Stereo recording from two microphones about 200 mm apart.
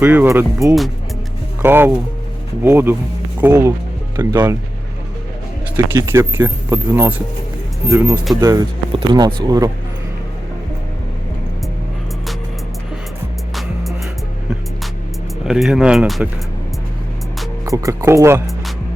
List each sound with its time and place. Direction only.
0.0 s speech: 10° right (ahead or behind)
5.7 s speech: 15° right (ahead or behind)
15.4 s speech: centre (ahead or behind)
17.7 s speech: 15° right (ahead or behind)